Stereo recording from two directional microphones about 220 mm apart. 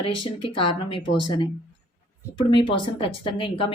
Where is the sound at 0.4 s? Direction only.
25° left (ahead or behind).